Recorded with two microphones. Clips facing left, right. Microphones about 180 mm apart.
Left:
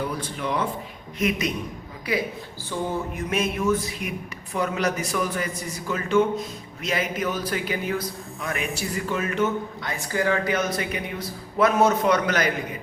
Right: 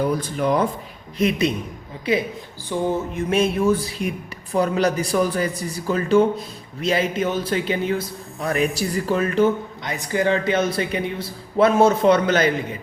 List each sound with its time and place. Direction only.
0.0 s a man's voice: 40° right (ahead or behind); by 2.2 s 25° right (ahead or behind)
2.7 s music: 15° right (ahead or behind)
3.2 s a man's voice: 30° right (ahead or behind)
9.8 s a man's voice: 20° right (ahead or behind)